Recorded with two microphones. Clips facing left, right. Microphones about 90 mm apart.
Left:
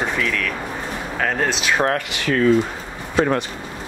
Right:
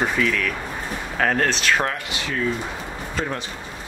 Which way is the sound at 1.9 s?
65° left (ahead or behind).